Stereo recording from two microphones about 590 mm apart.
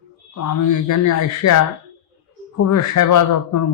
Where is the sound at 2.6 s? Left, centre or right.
Left.